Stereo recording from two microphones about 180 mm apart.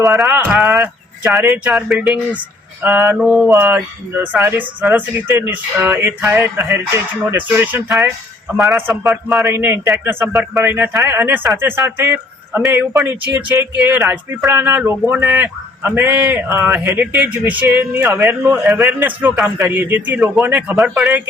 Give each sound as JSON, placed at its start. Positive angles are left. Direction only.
{"t": 0.0, "sound": "a man's voice", "side_deg": 0}
{"t": 3.2, "sound": "a man's voice", "side_deg": 0}
{"t": 3.5, "sound": "a man's voice", "side_deg": -10}
{"t": 9.5, "sound": "a man's voice", "side_deg": -15}